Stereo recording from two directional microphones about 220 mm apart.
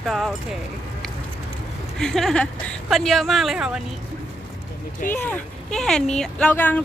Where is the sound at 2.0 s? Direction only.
Centre (ahead or behind).